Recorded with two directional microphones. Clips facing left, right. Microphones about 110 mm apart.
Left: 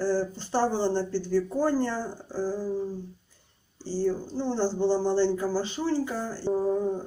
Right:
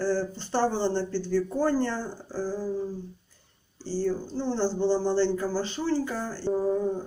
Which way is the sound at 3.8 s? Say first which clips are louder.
Left 1 dB; 15° left (ahead or behind).